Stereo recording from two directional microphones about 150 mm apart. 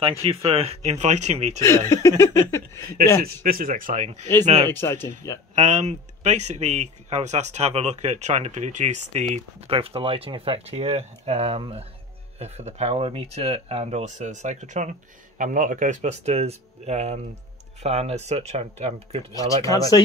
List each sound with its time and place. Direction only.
0.2 s speech: 40° right (ahead or behind)
1.6 s a sound: 20° left (ahead or behind)
3.4 s speech: 70° right (ahead or behind); by 4.2 s 55° right (ahead or behind)
4.6 s speech: 15° left (ahead or behind)
5.5 s speech: 50° right (ahead or behind)
9.7 s speech: 40° right (ahead or behind)
19.3 s a sound: 20° left (ahead or behind)